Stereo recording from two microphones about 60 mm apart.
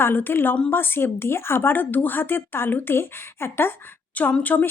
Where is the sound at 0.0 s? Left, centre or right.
Left.